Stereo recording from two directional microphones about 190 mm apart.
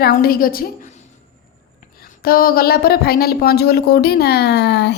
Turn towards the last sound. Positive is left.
turn(degrees=65)  # may be behind; listen again after turning